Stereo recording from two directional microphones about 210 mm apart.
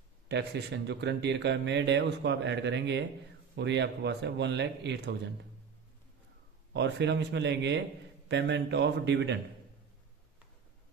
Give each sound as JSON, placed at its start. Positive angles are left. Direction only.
{"t": 0.3, "sound": "speech", "side_deg": -55}
{"t": 6.7, "sound": "speech", "side_deg": -55}